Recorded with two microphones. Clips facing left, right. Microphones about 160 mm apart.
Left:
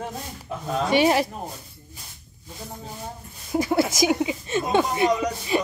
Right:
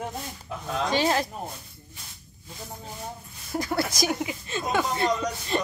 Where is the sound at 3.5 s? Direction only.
15° left (ahead or behind).